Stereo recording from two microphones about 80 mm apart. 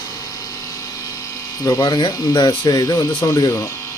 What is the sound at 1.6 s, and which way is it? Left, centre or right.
Speech, left.